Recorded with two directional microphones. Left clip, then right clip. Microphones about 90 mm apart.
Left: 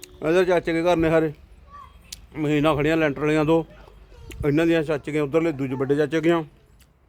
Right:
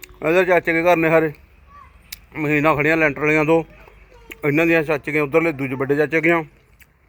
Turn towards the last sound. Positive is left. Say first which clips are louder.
# right 4 dB
turn(degrees=5)  # may be behind; listen again after turning